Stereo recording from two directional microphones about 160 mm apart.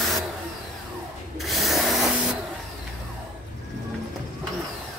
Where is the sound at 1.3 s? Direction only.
Centre (ahead or behind).